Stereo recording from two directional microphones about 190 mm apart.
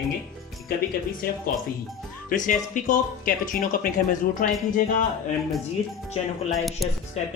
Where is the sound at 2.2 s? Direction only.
40° left (ahead or behind).